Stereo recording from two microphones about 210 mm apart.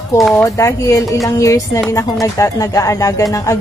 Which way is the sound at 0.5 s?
15° left (ahead or behind).